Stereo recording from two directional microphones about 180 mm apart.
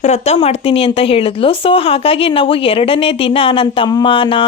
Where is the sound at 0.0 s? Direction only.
40° left (ahead or behind).